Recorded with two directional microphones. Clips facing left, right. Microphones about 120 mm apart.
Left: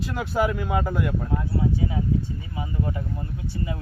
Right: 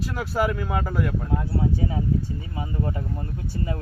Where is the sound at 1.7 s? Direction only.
40° right (ahead or behind).